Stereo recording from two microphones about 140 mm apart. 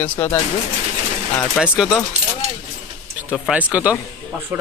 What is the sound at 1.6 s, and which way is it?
Speech, 5° right (ahead or behind).